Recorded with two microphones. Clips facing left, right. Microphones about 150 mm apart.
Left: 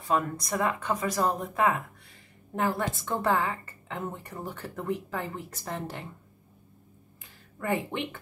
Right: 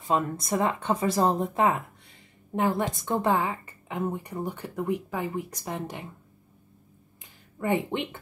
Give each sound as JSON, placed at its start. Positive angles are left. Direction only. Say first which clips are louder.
{"t": 0.0, "sound": "a woman's voice", "louder": "right 1 dB", "side_deg": -25}
{"t": 7.6, "sound": "speech", "louder": "right 3 dB", "side_deg": -20}